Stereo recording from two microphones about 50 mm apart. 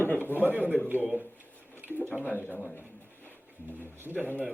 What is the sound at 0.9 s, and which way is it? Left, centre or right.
Speech, right.